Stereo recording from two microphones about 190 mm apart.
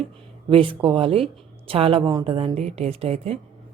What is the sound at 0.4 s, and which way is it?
Speech, 25° right (ahead or behind).